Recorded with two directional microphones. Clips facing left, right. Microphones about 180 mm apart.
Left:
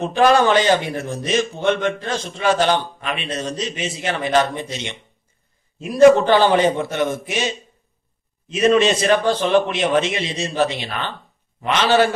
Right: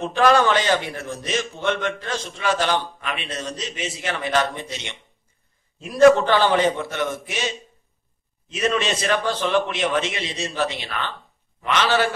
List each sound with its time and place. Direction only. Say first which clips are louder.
0.0 s a man's voice: left 3 dB; 15° left (ahead or behind)
8.5 s a man's voice: left 7 dB; 20° left (ahead or behind)